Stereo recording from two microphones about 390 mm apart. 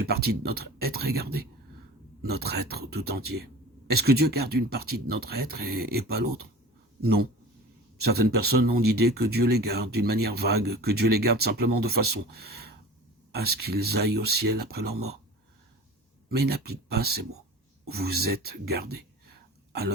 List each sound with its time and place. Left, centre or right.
0.0 s speech: right
16.3 s speech: right